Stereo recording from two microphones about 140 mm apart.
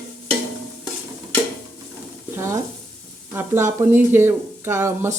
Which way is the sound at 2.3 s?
20° right (ahead or behind).